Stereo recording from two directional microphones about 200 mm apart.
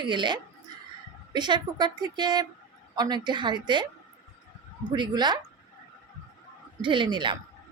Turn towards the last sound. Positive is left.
turn(degrees=-20)  # may be behind; listen again after turning